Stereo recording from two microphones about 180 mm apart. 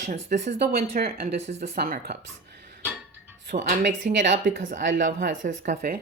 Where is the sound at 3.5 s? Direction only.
45° right (ahead or behind).